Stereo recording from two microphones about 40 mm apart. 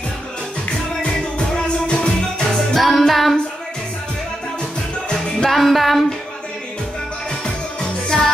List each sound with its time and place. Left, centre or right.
1.9 s music: left
2.7 s music: centre
5.5 s music: centre
8.1 s music: centre